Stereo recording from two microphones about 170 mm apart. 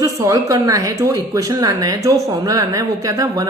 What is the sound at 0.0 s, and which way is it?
Speech, 20° right (ahead or behind).